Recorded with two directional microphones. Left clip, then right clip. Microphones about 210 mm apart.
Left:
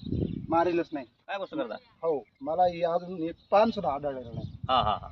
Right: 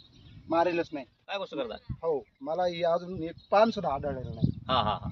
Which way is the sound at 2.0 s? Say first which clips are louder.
Left 1 dB; centre (ahead or behind).